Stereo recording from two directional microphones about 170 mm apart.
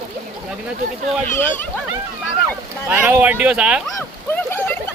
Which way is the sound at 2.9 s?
10° right (ahead or behind).